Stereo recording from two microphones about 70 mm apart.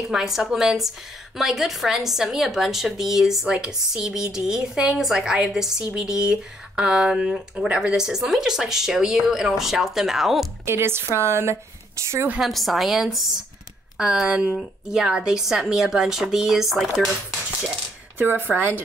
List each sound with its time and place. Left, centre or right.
0.1 s a woman's voice: centre
10.6 s a woman's voice: right
12.4 s a woman's voice: centre
18.1 s speech: right